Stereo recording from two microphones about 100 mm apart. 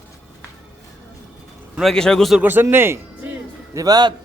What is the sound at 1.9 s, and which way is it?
Speech, 5° left (ahead or behind).